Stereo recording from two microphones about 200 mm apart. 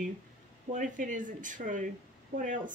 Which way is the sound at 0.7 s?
40° right (ahead or behind).